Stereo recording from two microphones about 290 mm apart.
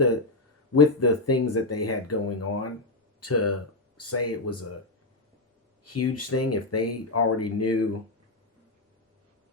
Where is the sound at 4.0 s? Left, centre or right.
Left.